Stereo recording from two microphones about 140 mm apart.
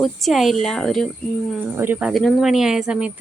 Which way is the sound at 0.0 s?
Centre (ahead or behind).